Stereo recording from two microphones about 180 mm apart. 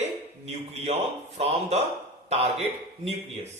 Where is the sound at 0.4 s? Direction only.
35° right (ahead or behind).